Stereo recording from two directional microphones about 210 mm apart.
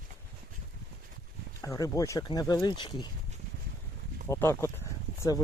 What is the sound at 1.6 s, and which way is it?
Speech, 15° left (ahead or behind).